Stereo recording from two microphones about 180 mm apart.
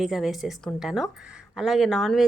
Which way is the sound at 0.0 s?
Centre (ahead or behind).